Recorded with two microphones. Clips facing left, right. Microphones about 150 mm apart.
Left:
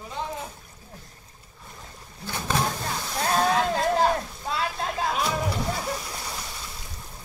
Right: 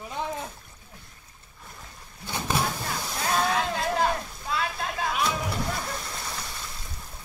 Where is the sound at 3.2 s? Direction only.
35° left (ahead or behind).